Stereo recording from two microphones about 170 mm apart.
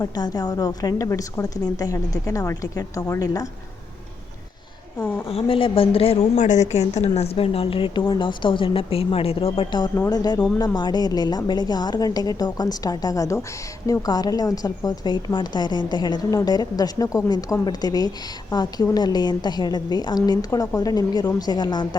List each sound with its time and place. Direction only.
0.0 s speech: 25° left (ahead or behind)
5.3 s a woman's voice: 35° left (ahead or behind)
9.9 s speech: 20° left (ahead or behind)